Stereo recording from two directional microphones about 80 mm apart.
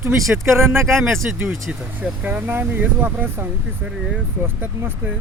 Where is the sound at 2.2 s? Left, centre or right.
Right.